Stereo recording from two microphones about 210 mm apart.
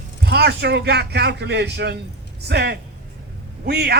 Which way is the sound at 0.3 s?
50° right (ahead or behind).